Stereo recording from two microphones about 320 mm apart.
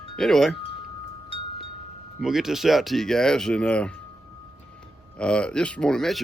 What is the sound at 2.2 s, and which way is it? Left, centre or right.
Speech, centre.